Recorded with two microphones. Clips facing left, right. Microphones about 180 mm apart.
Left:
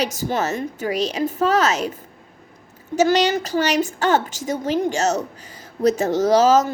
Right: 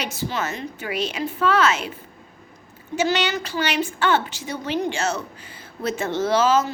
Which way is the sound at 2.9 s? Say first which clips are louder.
Left 5 dB; 40° left (ahead or behind).